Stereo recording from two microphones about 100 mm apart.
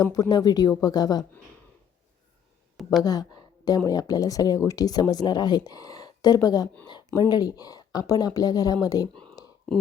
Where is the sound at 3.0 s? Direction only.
40° left (ahead or behind).